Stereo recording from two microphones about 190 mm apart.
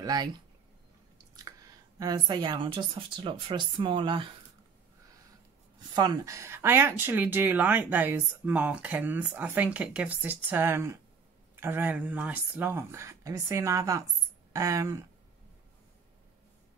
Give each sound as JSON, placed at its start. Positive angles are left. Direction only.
{"t": 0.0, "sound": "speech", "side_deg": -20}
{"t": 1.4, "sound": "speech", "side_deg": -20}
{"t": 5.8, "sound": "speech", "side_deg": -20}